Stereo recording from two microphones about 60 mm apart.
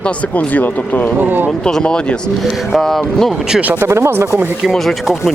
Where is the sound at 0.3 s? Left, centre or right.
Left.